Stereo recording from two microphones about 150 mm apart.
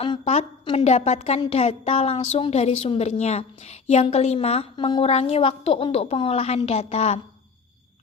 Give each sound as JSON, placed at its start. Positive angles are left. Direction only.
{"t": 0.0, "sound": "a woman's voice", "side_deg": 40}